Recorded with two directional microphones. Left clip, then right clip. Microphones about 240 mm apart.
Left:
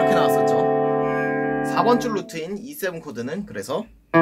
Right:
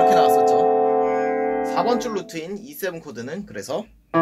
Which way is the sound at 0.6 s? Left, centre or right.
Left.